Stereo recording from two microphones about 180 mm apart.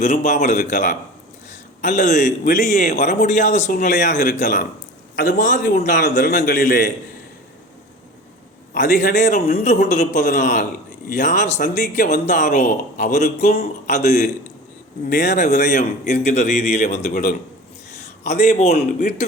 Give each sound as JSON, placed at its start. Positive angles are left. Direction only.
{"t": 0.0, "sound": "speech", "side_deg": 40}
{"t": 8.7, "sound": "a man's voice", "side_deg": 45}
{"t": 17.1, "sound": "a man's voice", "side_deg": 55}
{"t": 18.0, "sound": "a man's voice", "side_deg": 40}